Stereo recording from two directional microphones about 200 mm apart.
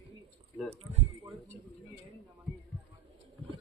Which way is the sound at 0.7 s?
30° right (ahead or behind).